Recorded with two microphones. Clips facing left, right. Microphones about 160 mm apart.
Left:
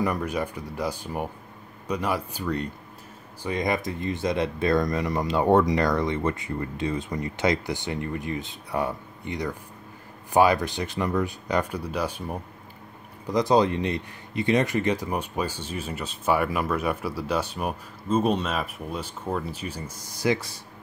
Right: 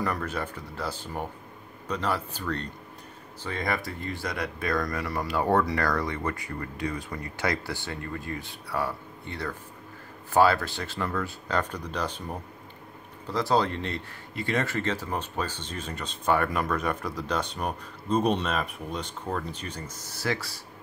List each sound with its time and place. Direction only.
0.0 s speech: 15° left (ahead or behind)